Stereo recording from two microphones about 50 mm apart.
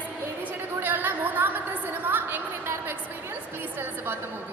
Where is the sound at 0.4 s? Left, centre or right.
Right.